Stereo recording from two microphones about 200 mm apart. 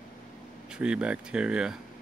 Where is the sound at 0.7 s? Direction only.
5° right (ahead or behind).